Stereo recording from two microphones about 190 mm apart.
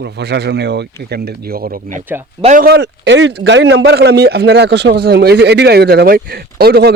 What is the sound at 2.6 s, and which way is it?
A man's voice, 60° right (ahead or behind).